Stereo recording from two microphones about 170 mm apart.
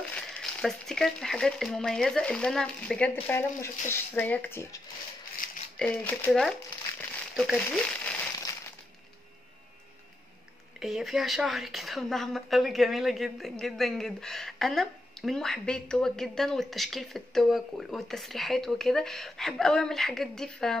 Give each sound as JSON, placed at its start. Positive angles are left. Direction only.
{"t": 0.1, "sound": "a woman's voice", "side_deg": 5}
{"t": 5.4, "sound": "rattle", "side_deg": 55}
{"t": 5.8, "sound": "speech", "side_deg": 10}
{"t": 10.8, "sound": "a woman's voice", "side_deg": 0}